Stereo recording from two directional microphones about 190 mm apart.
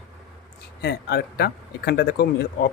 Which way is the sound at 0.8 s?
55° left (ahead or behind).